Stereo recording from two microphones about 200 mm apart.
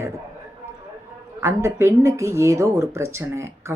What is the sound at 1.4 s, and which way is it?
Speech, 15° right (ahead or behind).